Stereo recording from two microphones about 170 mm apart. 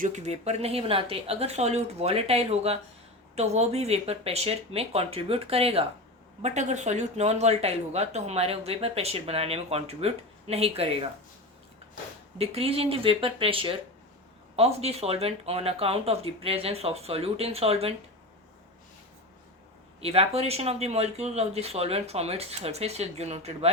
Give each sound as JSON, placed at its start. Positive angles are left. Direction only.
{"t": 0.0, "sound": "speech", "side_deg": -40}
{"t": 12.4, "sound": "speech", "side_deg": -35}
{"t": 20.0, "sound": "speech", "side_deg": -35}